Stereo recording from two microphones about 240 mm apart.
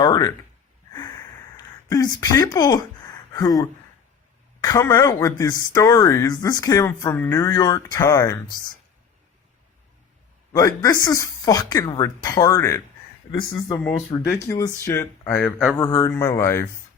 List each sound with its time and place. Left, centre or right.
0.0 s speech: centre
0.9 s a sound: centre
1.9 s speech: centre
10.5 s speech: centre
14.1 s speech: centre